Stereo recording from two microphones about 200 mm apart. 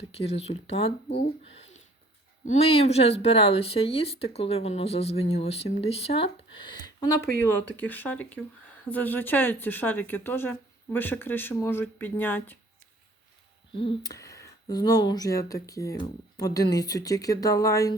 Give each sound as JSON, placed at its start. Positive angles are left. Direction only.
{"t": 0.1, "sound": "speech", "side_deg": 30}
{"t": 13.7, "sound": "speech", "side_deg": 25}
{"t": 14.1, "sound": "speech", "side_deg": 15}